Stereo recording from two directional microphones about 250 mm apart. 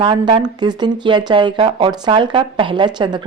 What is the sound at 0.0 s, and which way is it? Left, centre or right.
A woman's voice, centre.